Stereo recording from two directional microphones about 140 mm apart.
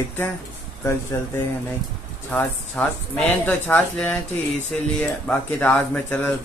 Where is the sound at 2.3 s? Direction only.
10° left (ahead or behind).